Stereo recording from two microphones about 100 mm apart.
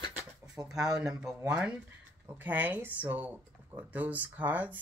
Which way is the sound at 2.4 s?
15° right (ahead or behind).